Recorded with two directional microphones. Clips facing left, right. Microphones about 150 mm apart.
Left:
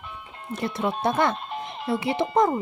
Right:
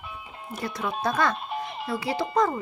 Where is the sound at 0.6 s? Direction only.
25° left (ahead or behind).